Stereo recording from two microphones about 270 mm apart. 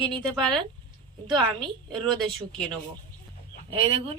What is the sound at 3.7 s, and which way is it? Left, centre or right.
Speech, centre.